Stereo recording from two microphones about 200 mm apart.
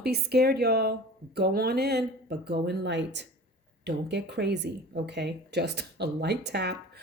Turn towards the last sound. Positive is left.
turn(degrees=-55)  # may be behind; listen again after turning